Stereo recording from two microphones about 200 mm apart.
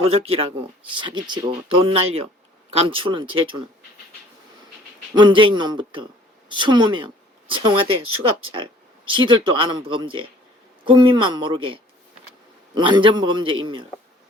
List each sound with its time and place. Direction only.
0.0 s a man's voice: 30° right (ahead or behind)
5.1 s a man's voice: 25° right (ahead or behind)